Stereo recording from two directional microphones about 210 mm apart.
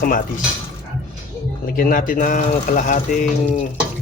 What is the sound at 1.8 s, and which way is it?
Speech, 40° left (ahead or behind).